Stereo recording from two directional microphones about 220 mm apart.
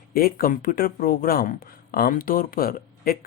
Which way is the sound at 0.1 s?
40° left (ahead or behind).